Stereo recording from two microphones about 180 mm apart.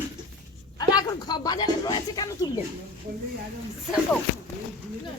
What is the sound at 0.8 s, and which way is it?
Speech, 20° left (ahead or behind).